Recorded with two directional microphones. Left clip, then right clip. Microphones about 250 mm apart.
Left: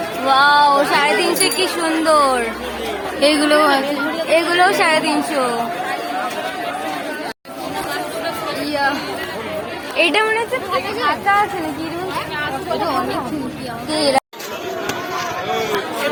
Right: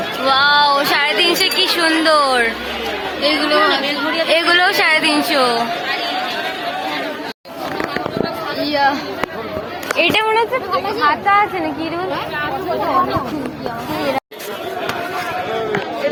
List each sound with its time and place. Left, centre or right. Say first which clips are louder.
0.3 s music: left 1 dB; centre
1.8 s a woman's voice: even; centre
3.2 s speech: left 2 dB; left
3.8 s a woman's voice: right 2 dB; centre
8.7 s speech: right 3 dB; centre
10.0 s music: even; centre
11.0 s speech: right 3 dB; centre